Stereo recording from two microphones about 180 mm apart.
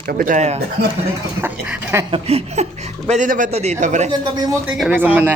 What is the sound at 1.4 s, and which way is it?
Speech, 15° right (ahead or behind).